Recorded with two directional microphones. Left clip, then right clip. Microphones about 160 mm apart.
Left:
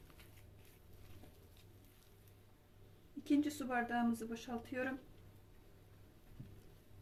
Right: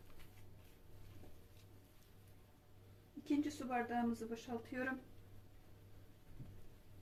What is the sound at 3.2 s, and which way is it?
Speech, 30° left (ahead or behind).